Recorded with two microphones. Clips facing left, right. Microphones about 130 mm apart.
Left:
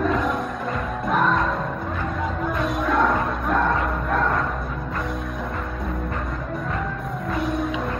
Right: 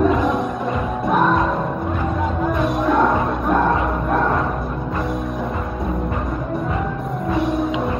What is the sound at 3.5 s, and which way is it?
Music, 25° right (ahead or behind).